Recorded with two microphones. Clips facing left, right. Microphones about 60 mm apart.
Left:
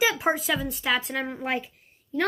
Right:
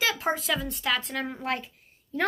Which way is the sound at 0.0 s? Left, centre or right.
Centre.